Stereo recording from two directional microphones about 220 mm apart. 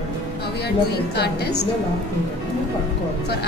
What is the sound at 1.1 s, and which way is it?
Speech, 50° left (ahead or behind).